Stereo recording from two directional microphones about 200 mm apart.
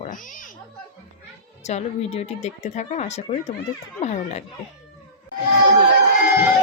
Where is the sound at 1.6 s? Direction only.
35° left (ahead or behind).